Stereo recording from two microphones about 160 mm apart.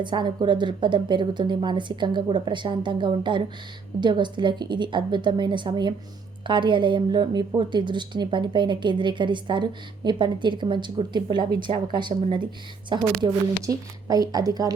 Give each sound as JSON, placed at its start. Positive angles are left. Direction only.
{"t": 0.0, "sound": "a woman's voice", "side_deg": -30}